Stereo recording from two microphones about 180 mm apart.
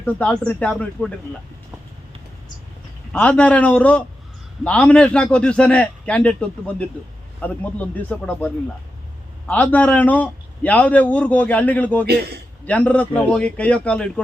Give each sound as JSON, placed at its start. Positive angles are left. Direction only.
{"t": 0.0, "sound": "speech", "side_deg": 10}
{"t": 3.1, "sound": "a man's voice", "side_deg": 5}
{"t": 12.0, "sound": "a man's voice", "side_deg": -65}
{"t": 12.6, "sound": "a man's voice", "side_deg": 5}